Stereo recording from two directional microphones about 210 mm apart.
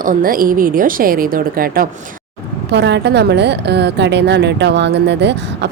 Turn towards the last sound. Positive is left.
turn(degrees=-55)  # may be behind; listen again after turning